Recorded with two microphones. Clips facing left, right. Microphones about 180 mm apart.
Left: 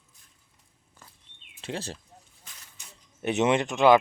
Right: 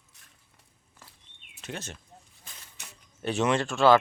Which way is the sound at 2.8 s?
70° right (ahead or behind).